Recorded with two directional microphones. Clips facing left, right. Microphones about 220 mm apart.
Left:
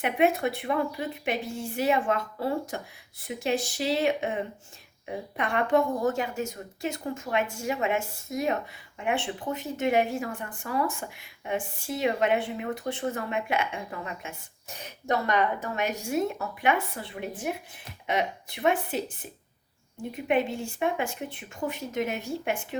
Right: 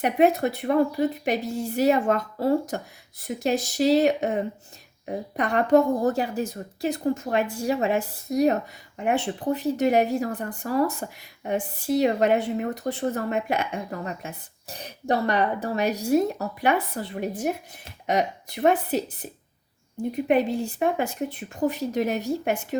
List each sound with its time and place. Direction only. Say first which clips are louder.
0.0 s speech: right 4 dB; 40° right (ahead or behind)